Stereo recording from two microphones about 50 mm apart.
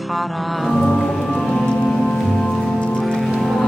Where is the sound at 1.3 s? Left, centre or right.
Centre.